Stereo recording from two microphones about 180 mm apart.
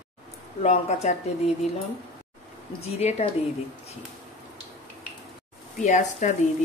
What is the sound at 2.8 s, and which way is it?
Speech, 35° left (ahead or behind).